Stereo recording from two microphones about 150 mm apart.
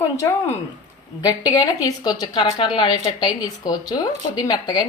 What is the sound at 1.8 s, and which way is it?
A woman's voice, 25° left (ahead or behind).